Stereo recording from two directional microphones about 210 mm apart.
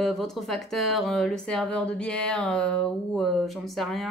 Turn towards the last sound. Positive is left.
turn(degrees=0)  # may be behind; listen again after turning